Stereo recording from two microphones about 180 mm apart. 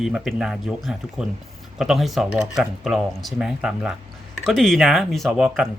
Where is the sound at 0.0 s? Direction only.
Centre (ahead or behind).